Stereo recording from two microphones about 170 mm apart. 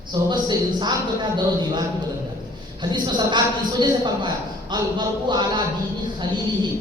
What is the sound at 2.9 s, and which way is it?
A woman's voice, 25° right (ahead or behind).